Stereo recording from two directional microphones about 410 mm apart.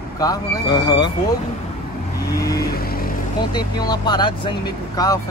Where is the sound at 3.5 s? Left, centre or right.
Centre.